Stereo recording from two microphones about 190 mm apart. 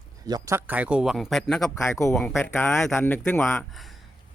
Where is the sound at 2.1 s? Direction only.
Centre (ahead or behind).